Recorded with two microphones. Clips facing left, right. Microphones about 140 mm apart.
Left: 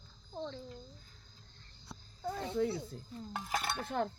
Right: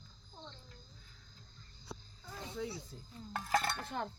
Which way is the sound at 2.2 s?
55° left (ahead or behind).